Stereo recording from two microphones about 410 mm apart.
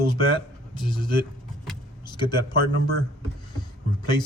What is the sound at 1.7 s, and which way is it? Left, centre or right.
Vehicle, centre.